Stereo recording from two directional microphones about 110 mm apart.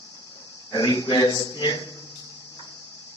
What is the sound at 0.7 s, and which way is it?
A man's voice, 40° left (ahead or behind).